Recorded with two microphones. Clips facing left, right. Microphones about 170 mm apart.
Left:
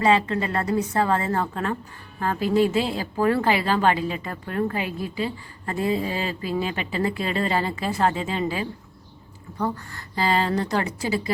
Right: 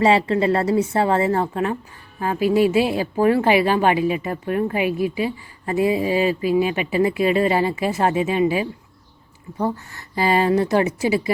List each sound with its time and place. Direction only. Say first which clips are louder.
0.0 s a woman's voice: right 4 dB; 30° right (ahead or behind)